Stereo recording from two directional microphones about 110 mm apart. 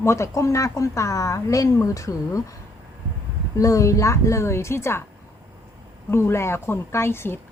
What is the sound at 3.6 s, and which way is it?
A woman's voice, 30° left (ahead or behind).